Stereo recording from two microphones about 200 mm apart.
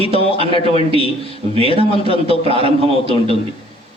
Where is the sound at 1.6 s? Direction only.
30° left (ahead or behind).